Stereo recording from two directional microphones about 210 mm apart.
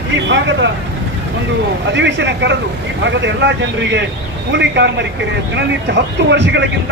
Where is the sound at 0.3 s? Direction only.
60° right (ahead or behind).